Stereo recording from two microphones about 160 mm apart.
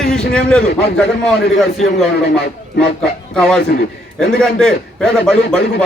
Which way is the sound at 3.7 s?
80° left.